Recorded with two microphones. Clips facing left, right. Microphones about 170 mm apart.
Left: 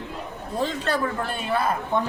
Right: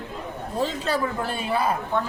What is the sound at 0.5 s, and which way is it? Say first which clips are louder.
A man's voice: even; 10° right (ahead or behind).